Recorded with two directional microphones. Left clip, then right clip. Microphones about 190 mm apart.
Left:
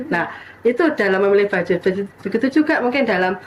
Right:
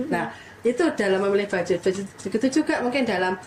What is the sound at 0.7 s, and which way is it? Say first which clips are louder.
Speech: left 5 dB; 20° left (ahead or behind).